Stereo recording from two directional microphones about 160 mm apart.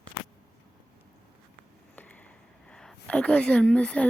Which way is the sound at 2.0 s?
10° left (ahead or behind).